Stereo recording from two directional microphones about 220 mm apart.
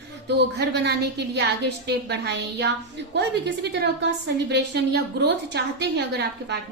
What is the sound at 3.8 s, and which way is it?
A woman's voice, 50° right (ahead or behind).